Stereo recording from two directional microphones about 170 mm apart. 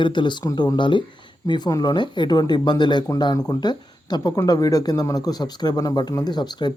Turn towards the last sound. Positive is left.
turn(degrees=25)  # may be behind; listen again after turning